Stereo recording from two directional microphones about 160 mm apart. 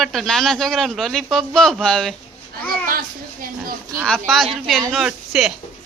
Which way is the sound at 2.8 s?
60° right (ahead or behind).